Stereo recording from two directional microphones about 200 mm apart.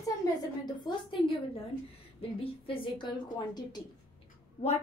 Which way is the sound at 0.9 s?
25° left (ahead or behind).